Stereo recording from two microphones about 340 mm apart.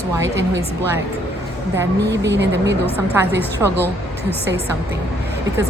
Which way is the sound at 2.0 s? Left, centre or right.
Right.